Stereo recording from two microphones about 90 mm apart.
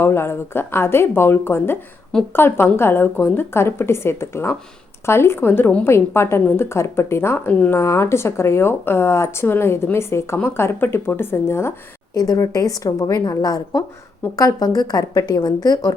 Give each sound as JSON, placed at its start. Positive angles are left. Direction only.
{"t": 0.0, "sound": "a woman's voice", "side_deg": 30}
{"t": 7.8, "sound": "a woman's voice", "side_deg": 30}
{"t": 12.1, "sound": "a woman's voice", "side_deg": 40}